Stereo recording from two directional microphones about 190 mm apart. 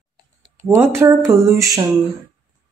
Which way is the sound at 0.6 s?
10° right (ahead or behind).